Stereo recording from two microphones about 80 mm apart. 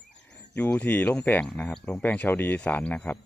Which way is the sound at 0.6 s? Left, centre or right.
Centre.